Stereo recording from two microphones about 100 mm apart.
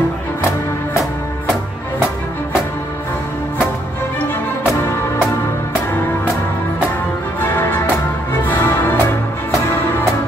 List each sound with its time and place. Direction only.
7.4 s music: 25° left (ahead or behind)